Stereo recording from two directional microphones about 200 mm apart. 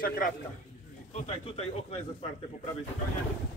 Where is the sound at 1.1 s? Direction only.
30° left (ahead or behind).